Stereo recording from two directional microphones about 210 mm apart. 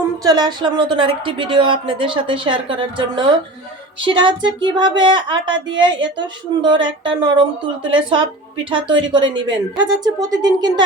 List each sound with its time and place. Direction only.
0.3 s speech: 20° right (ahead or behind)
4.0 s speech: 25° right (ahead or behind)